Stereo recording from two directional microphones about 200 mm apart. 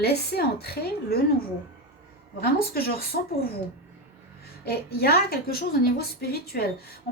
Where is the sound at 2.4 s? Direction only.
50° left (ahead or behind).